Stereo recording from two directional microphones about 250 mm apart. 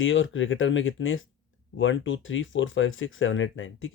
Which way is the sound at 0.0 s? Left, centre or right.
Left.